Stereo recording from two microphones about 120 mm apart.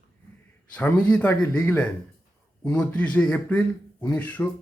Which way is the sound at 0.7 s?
10° left (ahead or behind).